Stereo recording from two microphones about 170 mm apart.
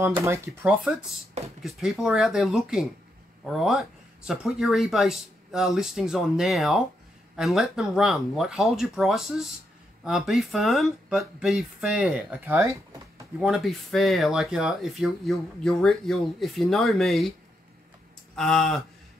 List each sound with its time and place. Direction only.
0.1 s speech: 15° right (ahead or behind)
1.6 s speech: centre (ahead or behind)
18.3 s speech: centre (ahead or behind)